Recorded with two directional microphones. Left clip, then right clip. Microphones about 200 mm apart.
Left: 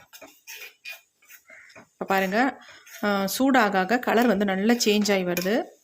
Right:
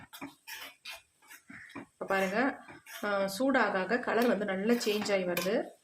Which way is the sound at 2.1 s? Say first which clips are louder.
Left 7 dB; 50° left (ahead or behind).